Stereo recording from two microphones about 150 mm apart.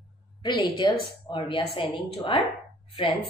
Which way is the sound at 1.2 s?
35° left (ahead or behind).